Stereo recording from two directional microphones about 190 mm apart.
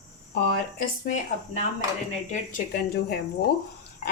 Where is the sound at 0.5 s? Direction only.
50° left (ahead or behind).